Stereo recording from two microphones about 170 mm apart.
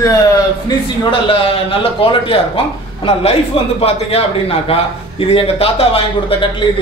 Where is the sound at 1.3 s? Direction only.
30° left (ahead or behind).